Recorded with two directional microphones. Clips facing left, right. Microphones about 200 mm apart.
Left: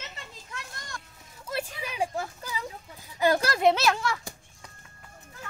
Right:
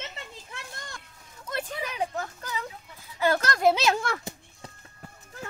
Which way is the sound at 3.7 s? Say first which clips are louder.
Right 1 dB; 15° right (ahead or behind).